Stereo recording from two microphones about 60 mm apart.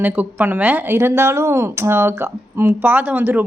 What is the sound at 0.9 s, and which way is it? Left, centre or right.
Speech, right.